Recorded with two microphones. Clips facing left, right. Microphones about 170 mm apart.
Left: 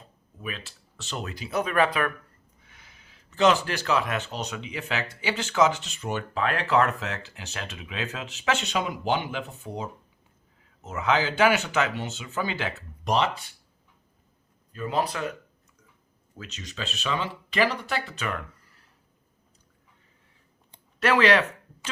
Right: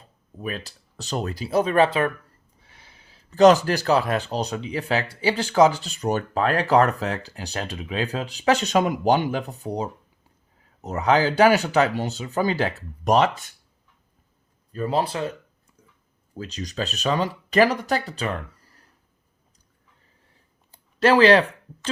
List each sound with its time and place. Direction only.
0.3 s speech: 40° right (ahead or behind)
14.7 s speech: 35° right (ahead or behind)
21.0 s speech: 30° right (ahead or behind)